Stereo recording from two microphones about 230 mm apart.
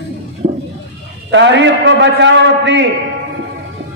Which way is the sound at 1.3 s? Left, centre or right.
Right.